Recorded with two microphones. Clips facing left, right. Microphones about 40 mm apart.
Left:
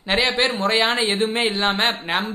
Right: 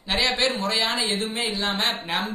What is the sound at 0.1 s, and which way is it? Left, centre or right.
Speech, left.